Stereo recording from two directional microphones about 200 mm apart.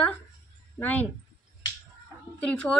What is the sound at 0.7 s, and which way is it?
Speech, 10° left (ahead or behind).